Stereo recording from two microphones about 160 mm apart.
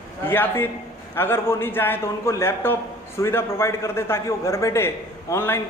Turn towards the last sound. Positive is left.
turn(degrees=15)  # may be behind; listen again after turning